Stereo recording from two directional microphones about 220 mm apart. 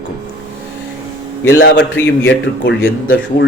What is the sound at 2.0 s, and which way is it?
Speech, 5° left (ahead or behind).